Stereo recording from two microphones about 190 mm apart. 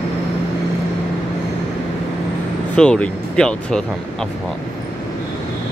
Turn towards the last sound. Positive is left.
turn(degrees=5)  # may be behind; listen again after turning